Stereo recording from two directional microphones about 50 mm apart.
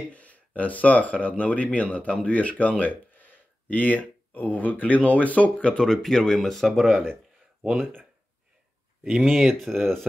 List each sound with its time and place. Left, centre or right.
0.1 s speech: left
5.9 s speech: centre
9.0 s speech: centre